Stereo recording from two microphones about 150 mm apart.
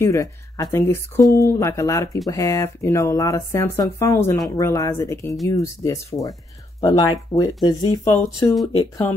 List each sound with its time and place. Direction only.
0.0 s speech: 20° left (ahead or behind)